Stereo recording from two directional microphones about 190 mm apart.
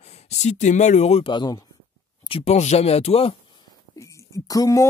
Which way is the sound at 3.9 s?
15° left (ahead or behind).